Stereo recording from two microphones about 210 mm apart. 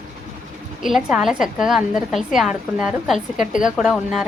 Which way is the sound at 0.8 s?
Centre (ahead or behind).